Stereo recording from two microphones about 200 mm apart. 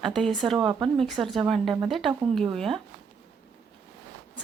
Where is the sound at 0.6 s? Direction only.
25° right (ahead or behind).